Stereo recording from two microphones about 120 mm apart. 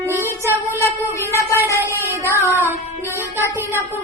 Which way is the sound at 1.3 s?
25° left (ahead or behind).